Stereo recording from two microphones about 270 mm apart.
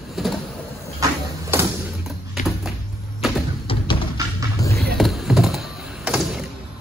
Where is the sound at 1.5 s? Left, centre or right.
Centre.